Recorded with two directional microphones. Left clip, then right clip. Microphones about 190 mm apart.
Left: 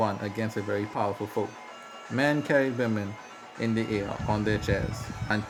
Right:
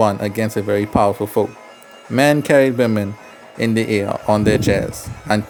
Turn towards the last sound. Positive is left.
turn(degrees=-50)  # may be behind; listen again after turning